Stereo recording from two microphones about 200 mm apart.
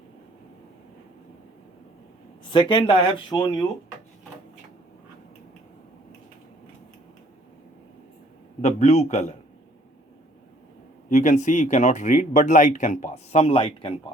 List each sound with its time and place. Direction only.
2.4 s speech: 25° left (ahead or behind)
8.6 s speech: 35° left (ahead or behind)
11.1 s speech: 40° left (ahead or behind)